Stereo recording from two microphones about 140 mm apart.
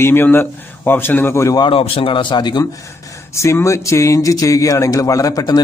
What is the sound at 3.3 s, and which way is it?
Speech, 20° left (ahead or behind).